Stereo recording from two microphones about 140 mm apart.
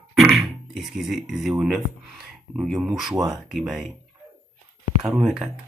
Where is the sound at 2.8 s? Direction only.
5° right (ahead or behind).